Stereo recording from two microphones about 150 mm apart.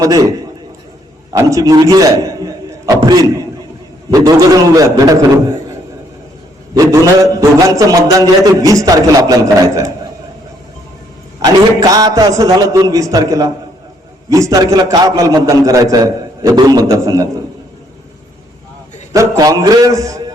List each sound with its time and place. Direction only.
0.0 s a man's voice: 25° right (ahead or behind)
1.3 s a man's voice: 20° right (ahead or behind)
6.7 s a man's voice: 20° right (ahead or behind)
11.4 s a man's voice: 25° right (ahead or behind)
19.1 s a man's voice: 20° right (ahead or behind)